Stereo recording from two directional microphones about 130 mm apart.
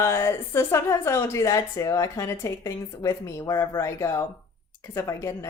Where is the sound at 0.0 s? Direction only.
20° left (ahead or behind).